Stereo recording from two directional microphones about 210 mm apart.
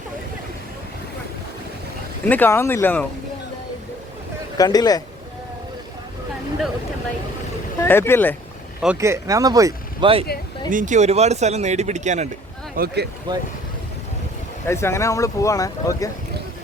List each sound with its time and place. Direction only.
2.2 s speech: 10° left (ahead or behind)
4.5 s speech: 15° left (ahead or behind)
7.8 s speech: 10° left (ahead or behind)
9.0 s speech: 15° right (ahead or behind)
10.7 s speech: 40° right (ahead or behind)
12.7 s speech: 50° right (ahead or behind)
13.3 s speech: 20° right (ahead or behind)
14.7 s speech: 15° left (ahead or behind)